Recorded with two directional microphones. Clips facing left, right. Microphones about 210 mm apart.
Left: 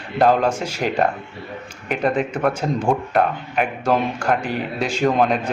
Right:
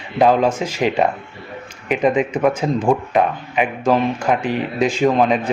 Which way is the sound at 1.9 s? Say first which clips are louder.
Right 4 dB; 10° right (ahead or behind).